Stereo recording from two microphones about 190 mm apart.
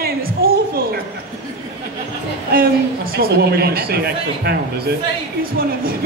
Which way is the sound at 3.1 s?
55° right (ahead or behind).